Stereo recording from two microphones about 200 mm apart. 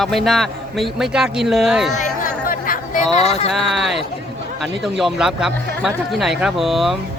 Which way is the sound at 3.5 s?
Centre (ahead or behind).